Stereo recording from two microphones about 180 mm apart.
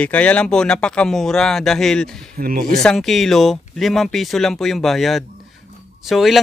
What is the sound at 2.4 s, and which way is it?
Speech, 55° right (ahead or behind).